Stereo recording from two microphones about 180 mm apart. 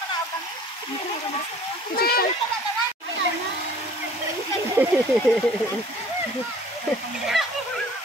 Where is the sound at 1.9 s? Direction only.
60° left (ahead or behind).